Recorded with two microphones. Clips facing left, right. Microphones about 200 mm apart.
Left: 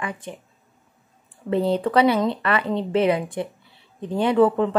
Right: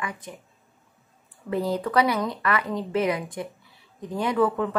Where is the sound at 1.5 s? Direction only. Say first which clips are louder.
Left 4 dB; 30° left (ahead or behind).